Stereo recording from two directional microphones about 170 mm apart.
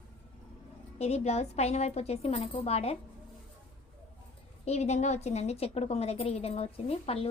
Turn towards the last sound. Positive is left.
turn(degrees=35)  # may be behind; listen again after turning